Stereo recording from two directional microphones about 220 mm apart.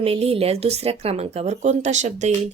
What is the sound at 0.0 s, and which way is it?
Speech, 25° right (ahead or behind).